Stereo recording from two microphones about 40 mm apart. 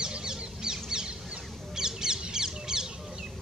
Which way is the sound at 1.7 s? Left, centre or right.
Centre.